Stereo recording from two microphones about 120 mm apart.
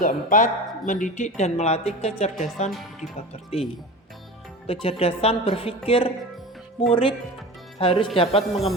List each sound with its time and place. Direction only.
0.0 s speech: 90° left; by 2.7 s 65° left (ahead or behind)
4.6 s a woman's voice: 55° left (ahead or behind)